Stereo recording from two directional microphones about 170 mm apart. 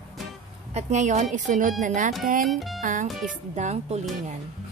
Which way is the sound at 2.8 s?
50° right (ahead or behind).